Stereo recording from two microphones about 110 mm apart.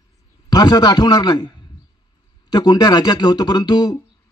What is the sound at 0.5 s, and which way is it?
A man's voice, 35° left (ahead or behind).